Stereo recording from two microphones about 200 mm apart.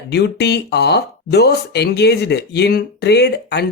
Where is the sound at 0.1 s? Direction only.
55° left (ahead or behind).